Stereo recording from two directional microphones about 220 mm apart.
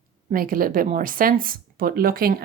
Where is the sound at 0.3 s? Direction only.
40° right (ahead or behind).